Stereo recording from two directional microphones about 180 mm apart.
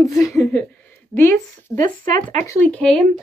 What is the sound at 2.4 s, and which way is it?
Speech, 15° left (ahead or behind).